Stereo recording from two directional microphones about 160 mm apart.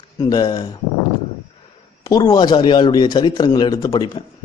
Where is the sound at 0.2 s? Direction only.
25° left (ahead or behind).